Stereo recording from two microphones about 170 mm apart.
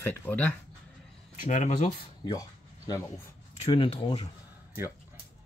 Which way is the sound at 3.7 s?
30° left (ahead or behind).